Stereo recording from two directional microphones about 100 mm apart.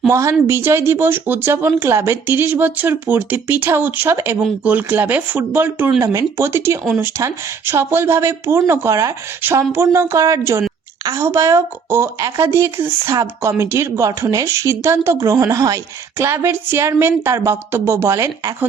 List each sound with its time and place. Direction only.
0.1 s a woman's voice: 30° right (ahead or behind)